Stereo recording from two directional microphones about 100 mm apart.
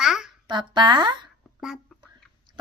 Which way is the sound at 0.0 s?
5° right (ahead or behind).